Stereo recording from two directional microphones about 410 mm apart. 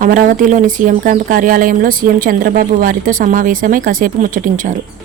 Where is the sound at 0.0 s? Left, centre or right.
Centre.